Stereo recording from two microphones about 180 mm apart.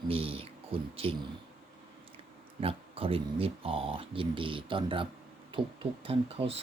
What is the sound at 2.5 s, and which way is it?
Speech, 30° right (ahead or behind).